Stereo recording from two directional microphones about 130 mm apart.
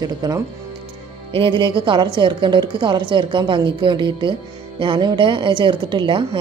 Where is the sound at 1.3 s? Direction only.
40° right (ahead or behind).